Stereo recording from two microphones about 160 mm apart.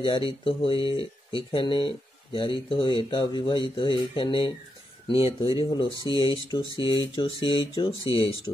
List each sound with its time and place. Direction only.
0.3 s speech: 35° left (ahead or behind)